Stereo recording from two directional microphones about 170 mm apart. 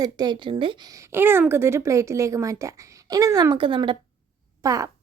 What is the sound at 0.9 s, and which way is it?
A woman's voice, 15° right (ahead or behind).